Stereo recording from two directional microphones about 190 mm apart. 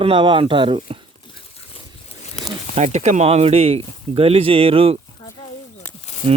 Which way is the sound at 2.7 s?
35° right (ahead or behind).